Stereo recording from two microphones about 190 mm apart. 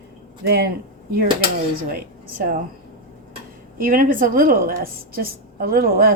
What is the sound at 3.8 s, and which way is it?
A woman's voice, 45° right (ahead or behind).